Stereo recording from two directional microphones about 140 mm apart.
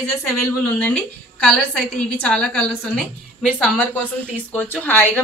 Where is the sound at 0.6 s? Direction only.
10° left (ahead or behind).